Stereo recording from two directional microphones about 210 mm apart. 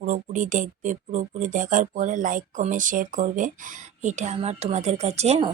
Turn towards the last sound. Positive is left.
turn(degrees=-30)  # may be behind; listen again after turning